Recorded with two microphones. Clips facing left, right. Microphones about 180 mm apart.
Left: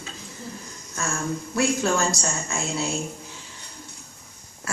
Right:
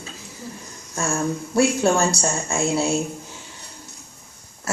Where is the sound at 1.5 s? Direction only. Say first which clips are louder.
Right 5 dB; 30° right (ahead or behind).